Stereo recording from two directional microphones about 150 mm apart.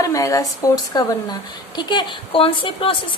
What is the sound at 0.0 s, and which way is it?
A woman's voice, 20° left (ahead or behind).